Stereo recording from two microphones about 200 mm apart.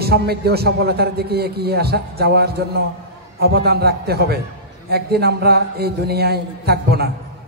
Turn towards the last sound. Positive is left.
turn(degrees=-50)  # may be behind; listen again after turning